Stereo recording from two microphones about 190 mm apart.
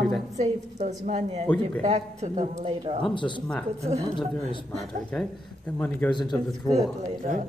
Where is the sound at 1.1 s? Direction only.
35° right (ahead or behind).